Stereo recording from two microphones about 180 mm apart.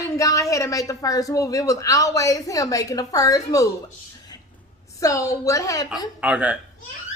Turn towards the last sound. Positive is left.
turn(degrees=-10)  # may be behind; listen again after turning